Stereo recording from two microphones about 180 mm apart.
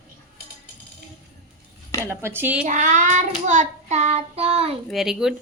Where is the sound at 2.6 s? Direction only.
45° right (ahead or behind).